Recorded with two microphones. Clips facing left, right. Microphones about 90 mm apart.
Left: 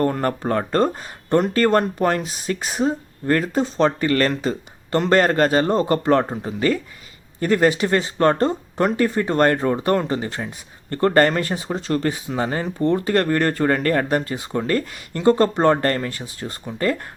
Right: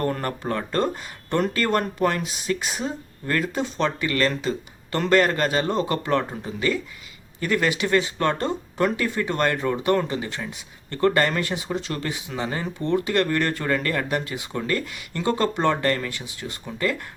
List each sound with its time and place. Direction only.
0.0 s speech: 30° left (ahead or behind)